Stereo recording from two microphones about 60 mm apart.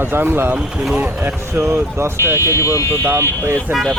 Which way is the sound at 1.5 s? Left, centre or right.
Right.